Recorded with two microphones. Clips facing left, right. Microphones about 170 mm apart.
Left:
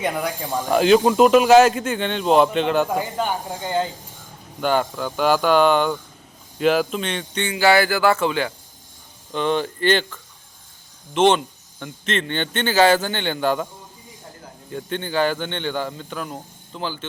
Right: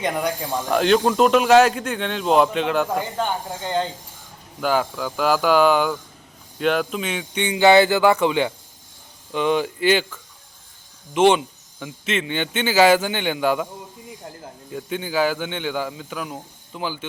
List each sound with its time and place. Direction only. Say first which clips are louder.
0.0 s speech: right 1 dB; 5° left (ahead or behind)
4.6 s speech: left 1 dB; centre (ahead or behind)
7.4 s speech: right 3 dB; 20° right (ahead or behind)
14.7 s speech: even; 5° right (ahead or behind)